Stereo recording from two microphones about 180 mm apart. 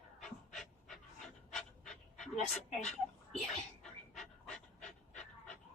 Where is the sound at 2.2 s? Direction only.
Centre (ahead or behind).